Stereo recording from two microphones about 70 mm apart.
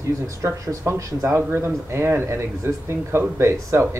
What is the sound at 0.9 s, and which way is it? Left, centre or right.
Speech, right.